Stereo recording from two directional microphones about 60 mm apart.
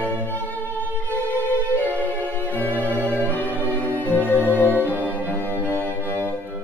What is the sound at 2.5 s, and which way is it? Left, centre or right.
Music, left.